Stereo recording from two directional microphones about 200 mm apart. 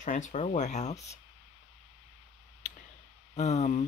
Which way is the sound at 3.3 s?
35° left (ahead or behind).